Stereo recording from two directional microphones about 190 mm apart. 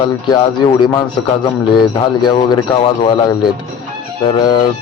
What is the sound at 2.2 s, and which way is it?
Speech, 25° left (ahead or behind).